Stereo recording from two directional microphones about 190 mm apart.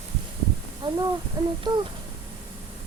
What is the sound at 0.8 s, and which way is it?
Speech, 25° right (ahead or behind).